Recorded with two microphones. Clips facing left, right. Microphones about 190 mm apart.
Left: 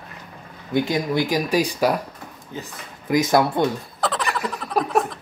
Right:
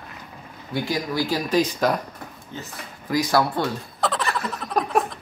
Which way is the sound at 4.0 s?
Centre (ahead or behind).